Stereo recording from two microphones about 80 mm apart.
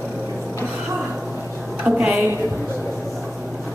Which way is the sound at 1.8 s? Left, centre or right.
Centre.